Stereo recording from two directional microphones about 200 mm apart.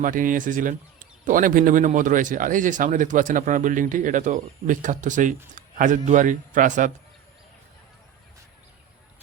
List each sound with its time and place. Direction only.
0.0 s speech: 40° right (ahead or behind)